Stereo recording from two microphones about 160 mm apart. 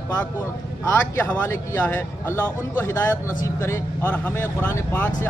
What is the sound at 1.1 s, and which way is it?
Speech, 15° left (ahead or behind).